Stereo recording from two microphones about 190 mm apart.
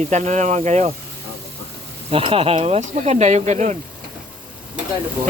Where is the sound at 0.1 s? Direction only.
40° right (ahead or behind).